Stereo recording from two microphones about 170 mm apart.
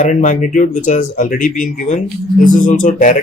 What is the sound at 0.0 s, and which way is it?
Speech, 50° left (ahead or behind).